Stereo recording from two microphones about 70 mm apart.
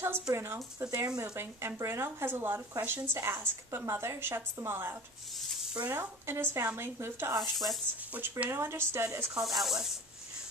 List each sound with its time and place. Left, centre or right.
0.0 s speech: right
0.8 s speech: right
1.3 s speech: right
8.1 s speech: right
8.5 s speech: right
9.4 s speech: centre